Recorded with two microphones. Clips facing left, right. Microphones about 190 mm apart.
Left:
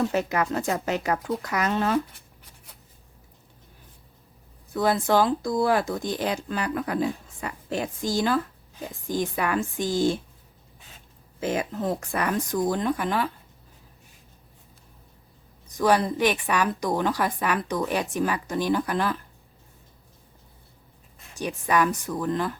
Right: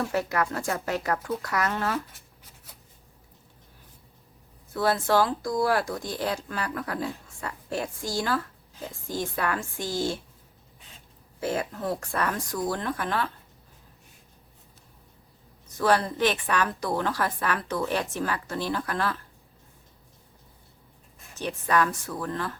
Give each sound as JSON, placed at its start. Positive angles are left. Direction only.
{"t": 0.0, "sound": "speech", "side_deg": 20}
{"t": 4.7, "sound": "speech", "side_deg": 15}
{"t": 11.3, "sound": "a woman's voice", "side_deg": 20}
{"t": 15.7, "sound": "a woman's voice", "side_deg": 15}
{"t": 21.3, "sound": "a woman's voice", "side_deg": 15}